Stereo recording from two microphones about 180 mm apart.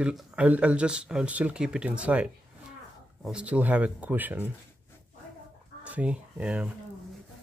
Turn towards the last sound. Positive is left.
turn(degrees=-5)  # may be behind; listen again after turning